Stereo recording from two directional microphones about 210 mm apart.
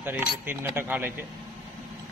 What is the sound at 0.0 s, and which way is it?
A man's voice, 10° right (ahead or behind).